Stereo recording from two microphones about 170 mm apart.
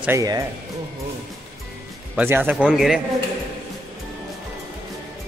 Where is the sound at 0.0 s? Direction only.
15° right (ahead or behind).